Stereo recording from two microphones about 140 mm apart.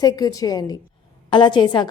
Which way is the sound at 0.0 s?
25° left (ahead or behind).